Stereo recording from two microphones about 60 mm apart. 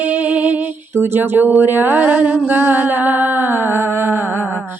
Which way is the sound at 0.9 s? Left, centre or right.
Right.